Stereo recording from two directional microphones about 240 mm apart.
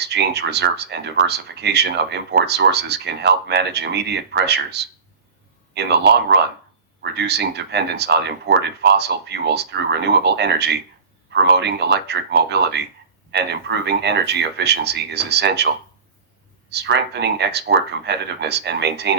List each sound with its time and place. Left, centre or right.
0.0 s speech: right